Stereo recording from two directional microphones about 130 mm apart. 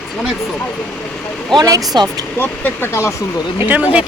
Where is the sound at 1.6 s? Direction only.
30° right (ahead or behind).